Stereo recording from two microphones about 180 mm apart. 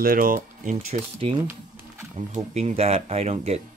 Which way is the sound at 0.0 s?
50° right (ahead or behind).